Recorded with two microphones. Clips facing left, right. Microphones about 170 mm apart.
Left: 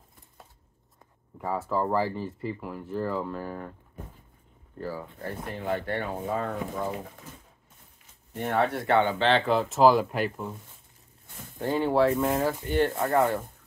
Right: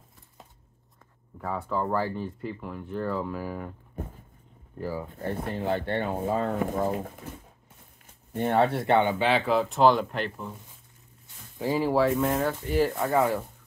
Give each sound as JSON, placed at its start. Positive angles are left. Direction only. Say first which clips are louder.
{"t": 1.4, "sound": "speech", "louder": "left 2 dB", "side_deg": 5}
{"t": 4.7, "sound": "speech", "louder": "right 2 dB", "side_deg": -15}
{"t": 5.4, "sound": "speech", "louder": "right 1 dB", "side_deg": -30}
{"t": 6.6, "sound": "speech", "louder": "right 5 dB", "side_deg": -45}
{"t": 8.4, "sound": "speech", "louder": "right 3 dB", "side_deg": -25}
{"t": 9.3, "sound": "speech", "louder": "even", "side_deg": 0}
{"t": 11.6, "sound": "speech", "louder": "even", "side_deg": 0}